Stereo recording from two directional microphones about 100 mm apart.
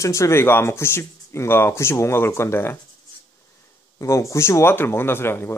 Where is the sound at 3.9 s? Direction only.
30° left (ahead or behind).